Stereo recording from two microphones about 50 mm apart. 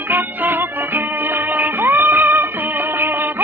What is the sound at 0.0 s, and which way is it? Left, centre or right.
Music, right.